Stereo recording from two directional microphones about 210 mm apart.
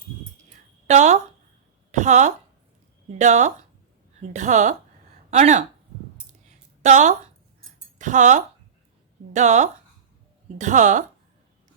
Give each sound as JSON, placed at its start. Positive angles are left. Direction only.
{"t": 0.9, "sound": "a woman's voice", "side_deg": -35}
{"t": 6.5, "sound": "a sound", "side_deg": -35}
{"t": 7.9, "sound": "a woman's voice", "side_deg": -35}